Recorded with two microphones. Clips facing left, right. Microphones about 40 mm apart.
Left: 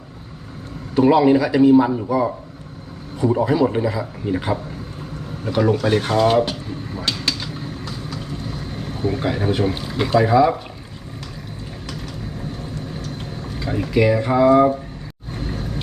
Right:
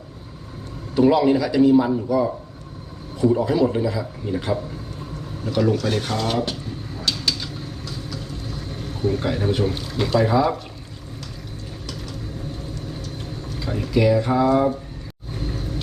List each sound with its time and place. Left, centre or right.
0.9 s speech: centre
2.0 s a man's voice: left
7.1 s vehicle: centre
13.5 s speech: centre
15.3 s vehicle: centre